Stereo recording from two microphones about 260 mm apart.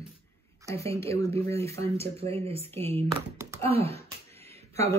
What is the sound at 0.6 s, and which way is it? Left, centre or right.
Speech, centre.